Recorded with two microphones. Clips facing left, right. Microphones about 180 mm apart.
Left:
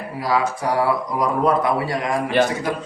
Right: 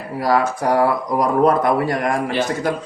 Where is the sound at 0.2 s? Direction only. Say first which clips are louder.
Right 3 dB; 50° right (ahead or behind).